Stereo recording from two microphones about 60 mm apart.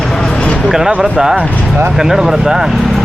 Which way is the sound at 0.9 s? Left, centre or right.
Centre.